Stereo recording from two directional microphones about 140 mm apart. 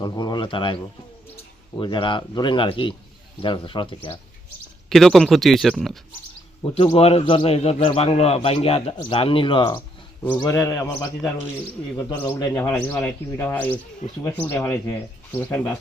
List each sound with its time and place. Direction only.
0.0 s speech: 30° left (ahead or behind)
4.9 s speech: centre (ahead or behind)
6.8 s a man's voice: 45° left (ahead or behind)
10.4 s a man's voice: 20° left (ahead or behind)
12.4 s speech: 20° left (ahead or behind)